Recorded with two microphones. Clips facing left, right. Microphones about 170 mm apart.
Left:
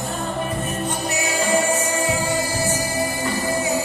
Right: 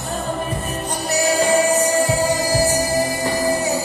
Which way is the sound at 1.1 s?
35° right (ahead or behind).